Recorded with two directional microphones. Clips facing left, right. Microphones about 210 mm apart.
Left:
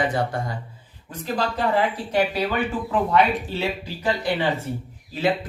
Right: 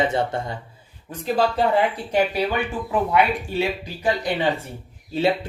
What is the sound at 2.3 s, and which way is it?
Speech, 15° right (ahead or behind).